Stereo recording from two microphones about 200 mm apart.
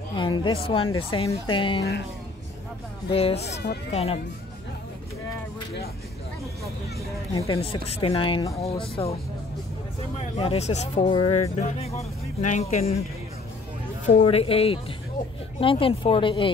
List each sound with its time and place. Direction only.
0.1 s speech: 25° left (ahead or behind)
3.1 s speech: 30° left (ahead or behind)
3.4 s speech: 60° left (ahead or behind)
3.9 s speech: 30° left (ahead or behind)
7.3 s speech: 15° left (ahead or behind)
7.6 s speech: 30° left (ahead or behind)
10.3 s speech: 30° left (ahead or behind)
14.2 s speech: 30° left (ahead or behind)